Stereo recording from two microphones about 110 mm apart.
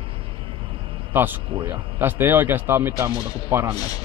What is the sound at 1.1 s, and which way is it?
A man's voice, 20° right (ahead or behind).